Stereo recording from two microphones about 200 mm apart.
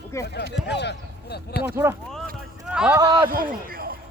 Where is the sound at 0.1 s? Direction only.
15° left (ahead or behind).